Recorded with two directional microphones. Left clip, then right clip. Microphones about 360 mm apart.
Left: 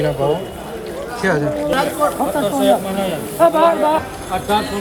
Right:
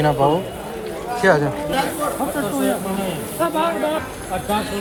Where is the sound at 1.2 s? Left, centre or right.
Centre.